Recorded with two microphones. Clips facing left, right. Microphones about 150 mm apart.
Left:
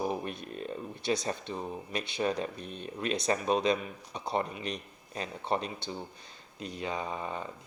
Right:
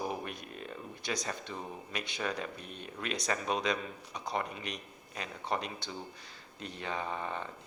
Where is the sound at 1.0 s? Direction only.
25° left (ahead or behind).